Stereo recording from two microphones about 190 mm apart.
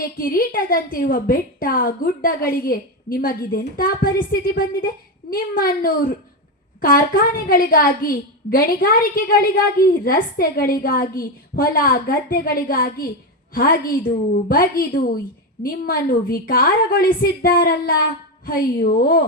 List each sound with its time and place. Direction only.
0.0 s a woman's voice: 50° left (ahead or behind)